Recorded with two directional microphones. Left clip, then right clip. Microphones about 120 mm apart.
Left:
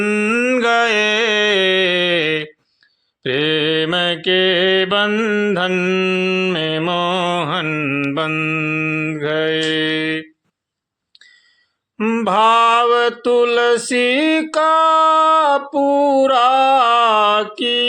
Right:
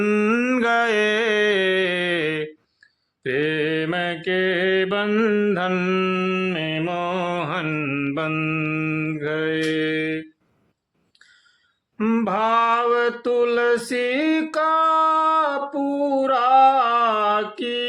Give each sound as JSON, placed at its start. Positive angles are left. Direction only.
{"t": 0.0, "sound": "mantra", "side_deg": 0}
{"t": 0.6, "sound": "music", "side_deg": 15}
{"t": 3.2, "sound": "mantra", "side_deg": 25}
{"t": 5.1, "sound": "mantra", "side_deg": 10}
{"t": 6.6, "sound": "mantra", "side_deg": 35}
{"t": 11.9, "sound": "mantra", "side_deg": 25}